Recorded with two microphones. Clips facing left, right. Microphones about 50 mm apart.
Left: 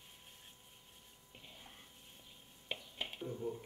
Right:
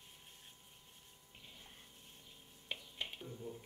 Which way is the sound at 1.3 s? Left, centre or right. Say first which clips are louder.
Left 2 dB; centre.